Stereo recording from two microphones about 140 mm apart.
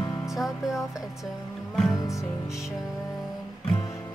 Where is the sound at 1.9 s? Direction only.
20° left (ahead or behind).